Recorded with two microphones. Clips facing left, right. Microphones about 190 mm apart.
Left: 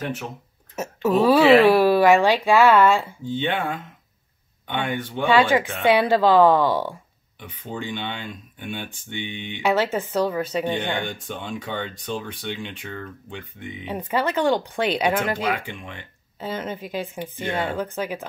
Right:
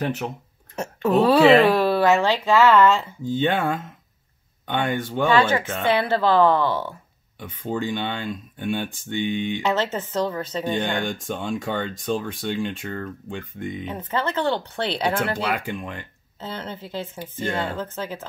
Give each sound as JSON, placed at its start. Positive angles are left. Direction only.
{"t": 0.7, "sound": "speech", "side_deg": 5}
{"t": 3.3, "sound": "speech", "side_deg": -40}
{"t": 5.3, "sound": "speech", "side_deg": 15}
{"t": 7.3, "sound": "speech", "side_deg": -40}
{"t": 9.6, "sound": "speech", "side_deg": 10}
{"t": 11.2, "sound": "speech", "side_deg": -45}
{"t": 13.8, "sound": "speech", "side_deg": 10}
{"t": 15.6, "sound": "speech", "side_deg": -40}
{"t": 16.3, "sound": "speech", "side_deg": 10}